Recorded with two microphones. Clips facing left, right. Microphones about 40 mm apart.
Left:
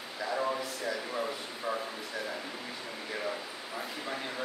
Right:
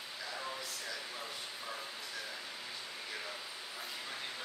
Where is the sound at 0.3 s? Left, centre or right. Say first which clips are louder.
Left 11 dB; left.